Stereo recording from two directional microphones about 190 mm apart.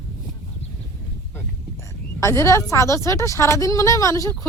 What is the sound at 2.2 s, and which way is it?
A woman's voice, 15° left (ahead or behind).